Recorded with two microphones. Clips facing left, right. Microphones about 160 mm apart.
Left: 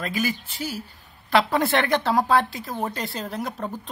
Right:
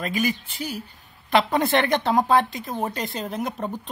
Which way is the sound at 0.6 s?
15° right (ahead or behind).